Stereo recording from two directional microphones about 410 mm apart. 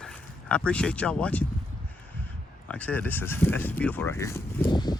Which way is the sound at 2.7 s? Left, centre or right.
Centre.